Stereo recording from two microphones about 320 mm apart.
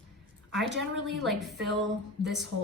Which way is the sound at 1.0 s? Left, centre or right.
Right.